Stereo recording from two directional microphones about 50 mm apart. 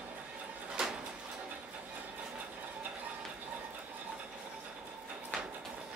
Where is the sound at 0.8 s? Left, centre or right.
Centre.